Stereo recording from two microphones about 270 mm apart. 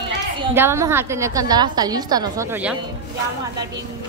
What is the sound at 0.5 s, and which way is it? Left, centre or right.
A woman's voice, centre.